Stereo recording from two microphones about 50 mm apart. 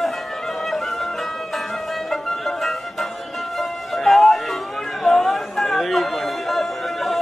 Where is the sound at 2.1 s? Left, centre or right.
Centre.